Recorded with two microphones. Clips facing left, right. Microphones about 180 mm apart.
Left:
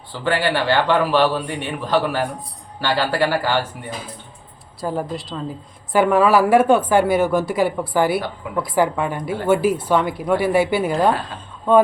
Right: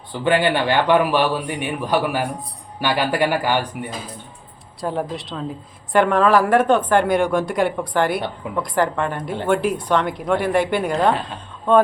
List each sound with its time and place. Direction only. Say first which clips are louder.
0.1 s a man's voice: right 2 dB; 20° right (ahead or behind)
4.8 s speech: even; centre (ahead or behind)